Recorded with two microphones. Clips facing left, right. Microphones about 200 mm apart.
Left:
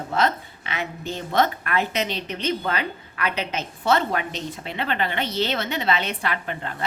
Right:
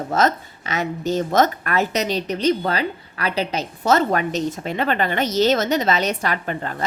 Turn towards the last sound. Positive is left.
turn(degrees=-45)  # may be behind; listen again after turning